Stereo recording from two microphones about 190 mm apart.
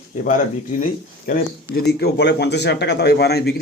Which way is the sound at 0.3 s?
45° left (ahead or behind).